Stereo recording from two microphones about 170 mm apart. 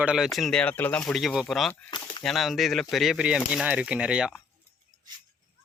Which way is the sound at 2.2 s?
Centre (ahead or behind).